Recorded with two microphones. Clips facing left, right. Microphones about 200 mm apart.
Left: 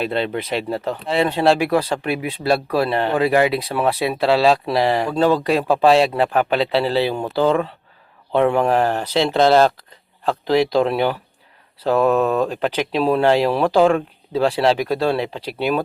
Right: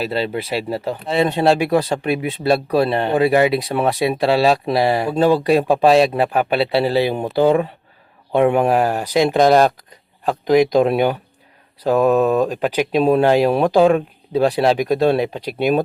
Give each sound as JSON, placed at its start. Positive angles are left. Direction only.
{"t": 0.0, "sound": "speech", "side_deg": -5}
{"t": 1.0, "sound": "speech", "side_deg": -20}